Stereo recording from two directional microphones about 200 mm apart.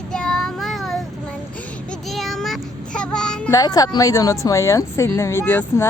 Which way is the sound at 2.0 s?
Centre (ahead or behind).